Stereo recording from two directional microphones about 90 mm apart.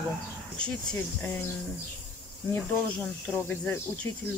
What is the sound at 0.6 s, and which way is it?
Speech, 15° left (ahead or behind).